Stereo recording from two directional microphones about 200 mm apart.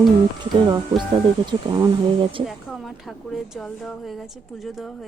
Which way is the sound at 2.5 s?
Centre (ahead or behind).